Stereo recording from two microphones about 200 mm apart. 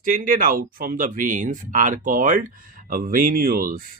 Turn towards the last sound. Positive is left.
turn(degrees=-45)  # may be behind; listen again after turning